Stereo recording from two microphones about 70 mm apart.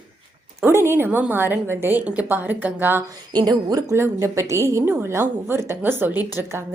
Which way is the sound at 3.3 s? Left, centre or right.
Right.